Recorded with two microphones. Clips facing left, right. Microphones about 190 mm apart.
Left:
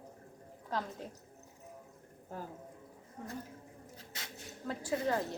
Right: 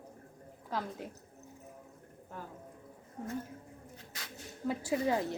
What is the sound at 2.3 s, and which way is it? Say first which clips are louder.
Speech: left 2 dB; 35° left (ahead or behind).